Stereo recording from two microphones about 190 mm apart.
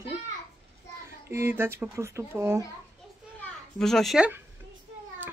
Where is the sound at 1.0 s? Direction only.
15° right (ahead or behind).